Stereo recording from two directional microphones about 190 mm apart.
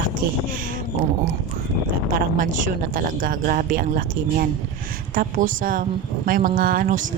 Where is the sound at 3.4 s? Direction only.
45° right (ahead or behind).